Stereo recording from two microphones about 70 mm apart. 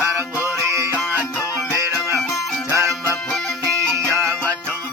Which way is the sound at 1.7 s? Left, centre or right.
Right.